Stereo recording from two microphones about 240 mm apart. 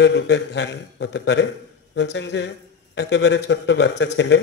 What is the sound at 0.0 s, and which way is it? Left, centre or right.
A man's voice, left.